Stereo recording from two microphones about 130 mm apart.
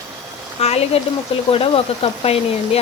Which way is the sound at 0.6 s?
55° left (ahead or behind).